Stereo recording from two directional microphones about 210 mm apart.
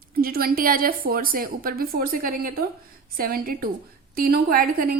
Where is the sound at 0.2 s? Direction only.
45° right (ahead or behind).